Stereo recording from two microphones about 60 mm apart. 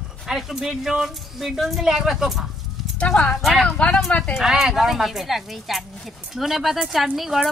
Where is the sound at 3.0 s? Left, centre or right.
Centre.